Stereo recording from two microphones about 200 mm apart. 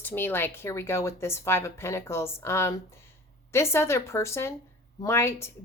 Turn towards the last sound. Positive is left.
turn(degrees=15)  # may be behind; listen again after turning